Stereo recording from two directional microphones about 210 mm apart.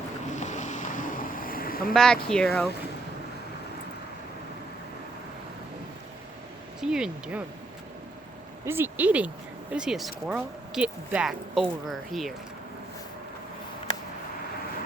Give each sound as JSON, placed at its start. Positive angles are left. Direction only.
{"t": 0.3, "sound": "boat", "side_deg": 35}
{"t": 1.9, "sound": "speech", "side_deg": 5}
{"t": 6.7, "sound": "speech", "side_deg": -5}
{"t": 8.6, "sound": "speech", "side_deg": -10}